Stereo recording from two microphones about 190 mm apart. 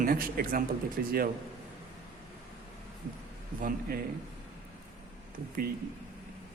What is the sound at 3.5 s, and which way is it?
Speech, 45° right (ahead or behind).